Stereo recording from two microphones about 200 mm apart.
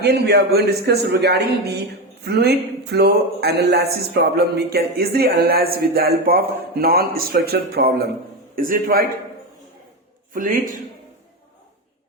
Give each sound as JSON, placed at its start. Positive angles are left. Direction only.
{"t": 0.0, "sound": "speech", "side_deg": -55}
{"t": 10.3, "sound": "speech", "side_deg": -45}